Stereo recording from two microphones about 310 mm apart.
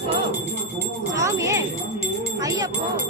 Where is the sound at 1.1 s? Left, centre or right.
Centre.